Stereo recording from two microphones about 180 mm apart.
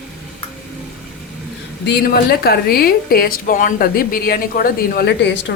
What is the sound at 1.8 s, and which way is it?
Speech, 65° left (ahead or behind).